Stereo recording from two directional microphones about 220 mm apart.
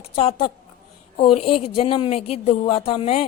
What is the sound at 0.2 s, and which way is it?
A woman's voice, 25° left (ahead or behind).